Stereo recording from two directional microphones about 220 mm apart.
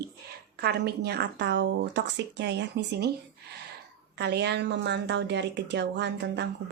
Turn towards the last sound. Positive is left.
turn(degrees=-50)  # may be behind; listen again after turning